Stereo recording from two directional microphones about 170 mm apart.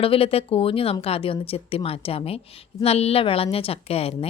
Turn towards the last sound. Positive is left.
turn(degrees=35)  # may be behind; listen again after turning